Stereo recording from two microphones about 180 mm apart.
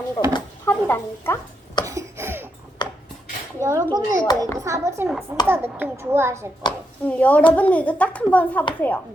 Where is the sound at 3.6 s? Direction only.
15° right (ahead or behind).